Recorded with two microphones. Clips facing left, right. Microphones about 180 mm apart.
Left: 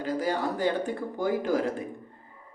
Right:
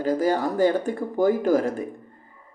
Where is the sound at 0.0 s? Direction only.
45° right (ahead or behind).